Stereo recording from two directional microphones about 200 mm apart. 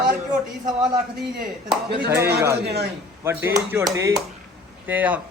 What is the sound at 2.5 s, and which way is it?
Speech, 55° right (ahead or behind).